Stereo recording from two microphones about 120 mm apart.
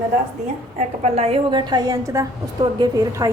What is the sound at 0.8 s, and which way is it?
Speech, 65° right (ahead or behind).